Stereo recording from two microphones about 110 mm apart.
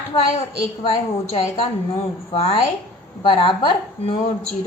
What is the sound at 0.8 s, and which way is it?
A woman's voice, 55° left (ahead or behind).